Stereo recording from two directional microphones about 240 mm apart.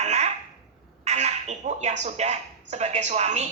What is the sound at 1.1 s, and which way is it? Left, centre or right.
A man's voice, right.